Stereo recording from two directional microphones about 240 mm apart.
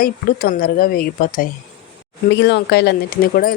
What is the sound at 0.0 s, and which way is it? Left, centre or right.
Speech, left.